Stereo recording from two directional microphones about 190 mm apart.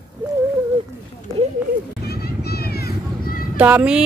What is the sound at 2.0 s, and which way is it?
Children playing, 55° left (ahead or behind).